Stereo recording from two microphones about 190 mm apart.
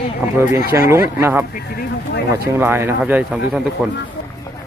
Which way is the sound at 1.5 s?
50° left (ahead or behind).